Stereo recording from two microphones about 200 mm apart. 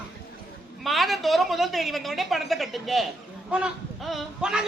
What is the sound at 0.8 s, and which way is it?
Speech, centre (ahead or behind).